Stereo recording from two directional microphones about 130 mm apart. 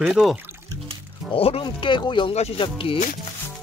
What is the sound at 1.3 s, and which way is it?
Speech, 45° left (ahead or behind).